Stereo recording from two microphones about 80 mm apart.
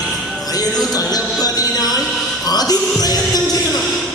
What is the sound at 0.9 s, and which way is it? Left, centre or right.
Music, left.